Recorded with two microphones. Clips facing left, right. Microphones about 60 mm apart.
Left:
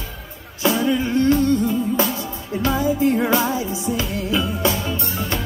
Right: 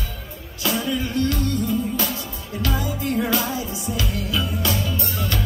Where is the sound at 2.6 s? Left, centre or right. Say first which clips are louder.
Left 7 dB; left.